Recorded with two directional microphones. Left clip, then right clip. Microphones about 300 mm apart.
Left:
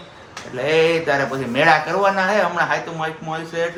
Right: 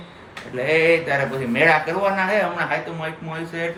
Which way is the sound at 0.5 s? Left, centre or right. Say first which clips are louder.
Even; centre.